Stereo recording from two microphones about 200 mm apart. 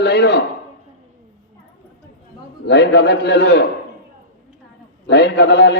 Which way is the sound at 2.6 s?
60° left (ahead or behind).